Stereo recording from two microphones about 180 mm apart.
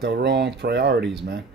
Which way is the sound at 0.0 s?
65° right (ahead or behind).